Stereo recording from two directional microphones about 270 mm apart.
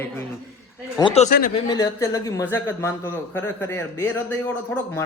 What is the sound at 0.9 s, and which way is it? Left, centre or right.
Speech, left.